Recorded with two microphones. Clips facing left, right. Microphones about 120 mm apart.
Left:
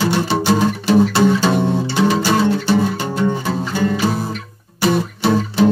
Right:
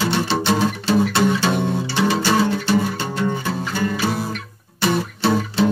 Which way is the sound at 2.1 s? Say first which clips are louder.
Left 1 dB; 5° left (ahead or behind).